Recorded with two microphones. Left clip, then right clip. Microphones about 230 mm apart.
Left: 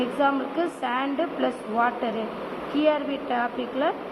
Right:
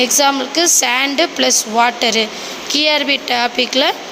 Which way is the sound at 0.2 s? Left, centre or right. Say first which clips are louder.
Right 10 dB; right.